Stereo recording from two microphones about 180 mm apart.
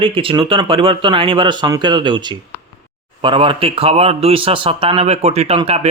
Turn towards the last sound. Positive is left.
turn(degrees=-35)  # may be behind; listen again after turning